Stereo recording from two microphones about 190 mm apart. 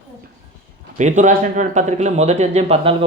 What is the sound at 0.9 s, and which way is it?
Speech, 40° right (ahead or behind).